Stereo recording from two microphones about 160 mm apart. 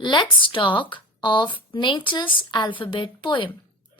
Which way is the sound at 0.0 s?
30° left (ahead or behind).